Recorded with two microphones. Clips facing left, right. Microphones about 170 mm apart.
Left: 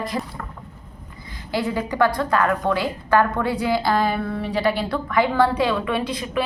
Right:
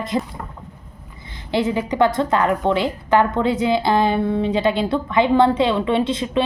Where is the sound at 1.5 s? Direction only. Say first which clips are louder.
Right 4 dB; 20° right (ahead or behind).